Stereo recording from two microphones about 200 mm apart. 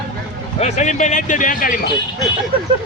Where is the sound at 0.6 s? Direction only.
35° left (ahead or behind).